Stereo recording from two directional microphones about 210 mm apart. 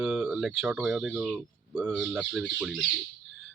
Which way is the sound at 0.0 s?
5° right (ahead or behind).